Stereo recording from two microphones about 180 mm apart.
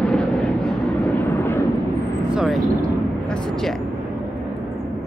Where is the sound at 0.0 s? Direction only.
5° left (ahead or behind).